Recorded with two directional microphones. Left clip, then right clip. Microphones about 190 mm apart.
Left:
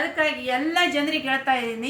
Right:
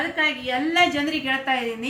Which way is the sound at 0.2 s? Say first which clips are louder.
Right 1 dB; 10° left (ahead or behind).